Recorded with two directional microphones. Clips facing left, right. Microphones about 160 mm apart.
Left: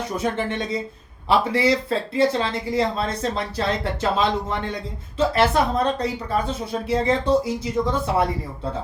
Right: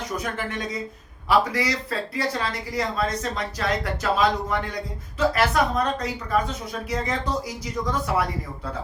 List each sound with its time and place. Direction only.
0.2 s speech: 25° left (ahead or behind)